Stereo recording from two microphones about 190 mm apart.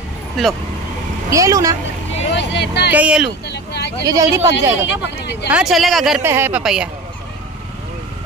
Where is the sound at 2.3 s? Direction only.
65° left (ahead or behind).